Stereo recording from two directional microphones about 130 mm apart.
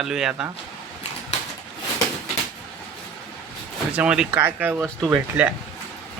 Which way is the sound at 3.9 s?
10° right (ahead or behind).